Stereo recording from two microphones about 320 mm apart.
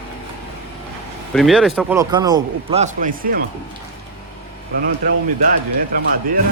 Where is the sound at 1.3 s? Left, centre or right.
Centre; by 3.4 s right.